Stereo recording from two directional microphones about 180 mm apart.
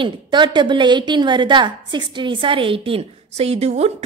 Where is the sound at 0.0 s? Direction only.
25° right (ahead or behind).